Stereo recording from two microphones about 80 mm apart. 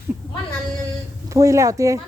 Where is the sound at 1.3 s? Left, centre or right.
Right.